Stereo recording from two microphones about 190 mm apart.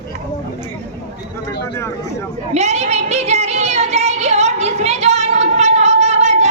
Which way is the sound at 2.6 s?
35° right (ahead or behind).